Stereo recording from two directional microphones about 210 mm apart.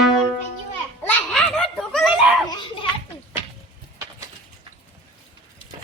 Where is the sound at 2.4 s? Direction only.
20° left (ahead or behind).